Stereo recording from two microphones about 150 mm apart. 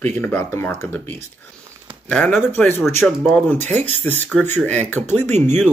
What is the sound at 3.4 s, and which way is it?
Speech, 15° left (ahead or behind).